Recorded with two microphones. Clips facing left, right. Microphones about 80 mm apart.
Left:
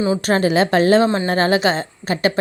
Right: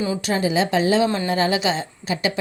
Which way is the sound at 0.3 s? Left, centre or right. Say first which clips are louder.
Left 4 dB; left.